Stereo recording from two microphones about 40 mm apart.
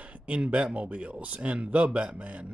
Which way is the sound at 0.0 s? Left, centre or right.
Right.